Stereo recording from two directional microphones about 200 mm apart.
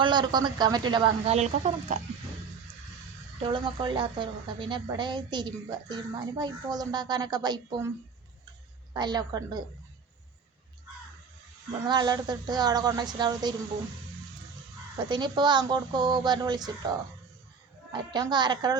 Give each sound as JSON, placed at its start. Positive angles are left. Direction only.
{"t": 0.0, "sound": "a woman's voice", "side_deg": -20}
{"t": 3.4, "sound": "a woman's voice", "side_deg": -25}
{"t": 11.9, "sound": "a woman's voice", "side_deg": -20}
{"t": 14.9, "sound": "a woman's voice", "side_deg": -20}
{"t": 17.9, "sound": "a woman's voice", "side_deg": -20}